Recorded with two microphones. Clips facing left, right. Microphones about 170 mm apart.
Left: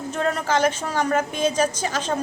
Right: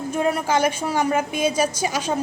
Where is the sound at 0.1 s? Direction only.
10° right (ahead or behind).